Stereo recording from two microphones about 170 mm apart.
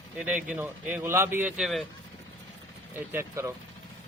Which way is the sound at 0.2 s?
5° right (ahead or behind).